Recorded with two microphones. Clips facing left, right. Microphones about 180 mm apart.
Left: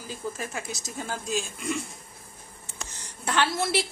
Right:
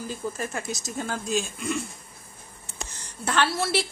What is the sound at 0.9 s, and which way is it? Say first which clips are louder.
Speech: right 3 dB; centre (ahead or behind).